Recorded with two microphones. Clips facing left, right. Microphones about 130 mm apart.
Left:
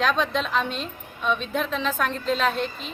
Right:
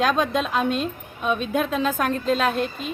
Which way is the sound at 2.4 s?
5° right (ahead or behind).